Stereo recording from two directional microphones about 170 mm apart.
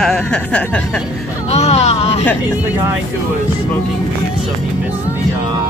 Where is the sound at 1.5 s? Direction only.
40° left (ahead or behind).